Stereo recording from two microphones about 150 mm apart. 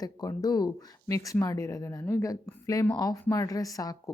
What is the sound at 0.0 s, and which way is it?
A woman's voice, 25° left (ahead or behind).